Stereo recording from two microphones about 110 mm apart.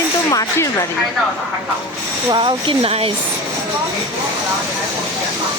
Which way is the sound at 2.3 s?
45° right (ahead or behind).